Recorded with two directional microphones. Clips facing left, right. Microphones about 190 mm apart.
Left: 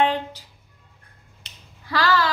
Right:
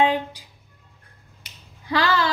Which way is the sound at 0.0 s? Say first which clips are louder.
Right 1 dB; 10° right (ahead or behind).